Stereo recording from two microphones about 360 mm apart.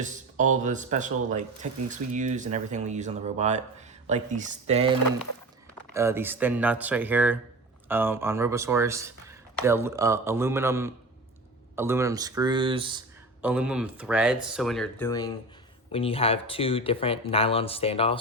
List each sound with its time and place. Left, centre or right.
0.0 s speech: right
13.4 s speech: centre